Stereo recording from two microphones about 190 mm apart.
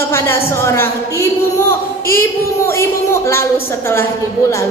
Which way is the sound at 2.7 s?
15° left (ahead or behind).